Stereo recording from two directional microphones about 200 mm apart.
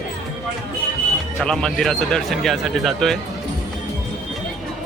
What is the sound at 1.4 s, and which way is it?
Speech, centre (ahead or behind).